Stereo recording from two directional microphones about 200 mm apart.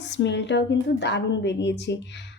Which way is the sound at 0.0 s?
60° left (ahead or behind).